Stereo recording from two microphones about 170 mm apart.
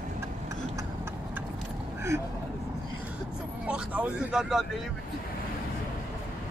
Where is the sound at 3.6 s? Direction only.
5° right (ahead or behind).